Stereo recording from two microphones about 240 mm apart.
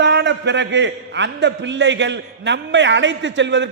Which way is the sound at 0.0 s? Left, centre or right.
Right.